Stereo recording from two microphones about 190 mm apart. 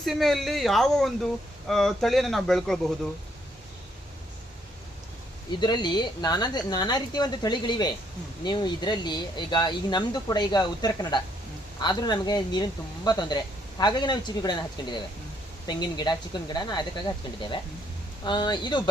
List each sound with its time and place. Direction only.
0.0 s speech: centre (ahead or behind)
5.5 s speech: 25° left (ahead or behind)
18.3 s speech: 25° left (ahead or behind)